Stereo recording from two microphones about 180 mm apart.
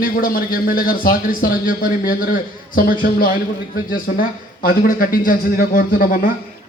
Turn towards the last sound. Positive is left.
turn(degrees=50)  # may be behind; listen again after turning